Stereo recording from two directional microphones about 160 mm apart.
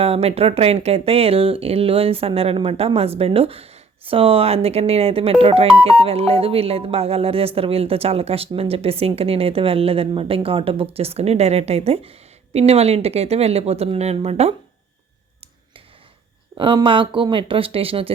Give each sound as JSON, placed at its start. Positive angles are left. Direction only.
{"t": 0.0, "sound": "speech", "side_deg": -40}
{"t": 16.6, "sound": "speech", "side_deg": -30}